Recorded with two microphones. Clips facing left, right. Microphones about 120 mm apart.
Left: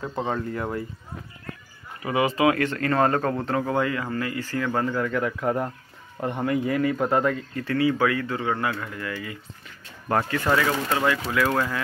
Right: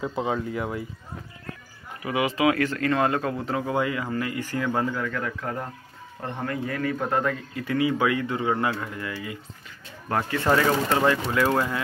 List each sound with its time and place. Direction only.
0.0 s speech: 5° right (ahead or behind)
2.0 s speech: 5° right (ahead or behind)
4.9 s a man's voice: 10° left (ahead or behind)
7.5 s speech: 15° right (ahead or behind)